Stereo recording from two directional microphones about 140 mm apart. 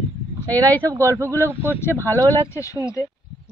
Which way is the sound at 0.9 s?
20° right (ahead or behind).